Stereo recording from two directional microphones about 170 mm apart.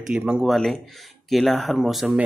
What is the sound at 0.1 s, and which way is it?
Speech, 5° right (ahead or behind).